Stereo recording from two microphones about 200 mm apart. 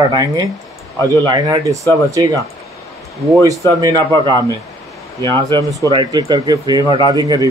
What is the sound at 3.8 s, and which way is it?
Speech, 20° right (ahead or behind).